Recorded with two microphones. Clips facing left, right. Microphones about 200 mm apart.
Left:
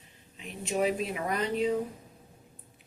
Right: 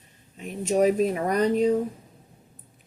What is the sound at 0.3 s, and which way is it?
A woman's voice, 45° right (ahead or behind).